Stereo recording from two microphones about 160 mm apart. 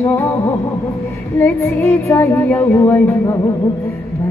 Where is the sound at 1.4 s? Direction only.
15° left (ahead or behind).